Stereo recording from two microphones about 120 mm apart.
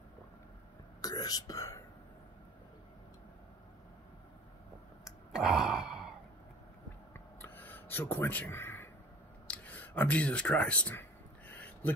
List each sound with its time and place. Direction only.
1.0 s whispering: 35° left (ahead or behind)
5.3 s sigh: 5° right (ahead or behind)
7.4 s a sound: 15° left (ahead or behind)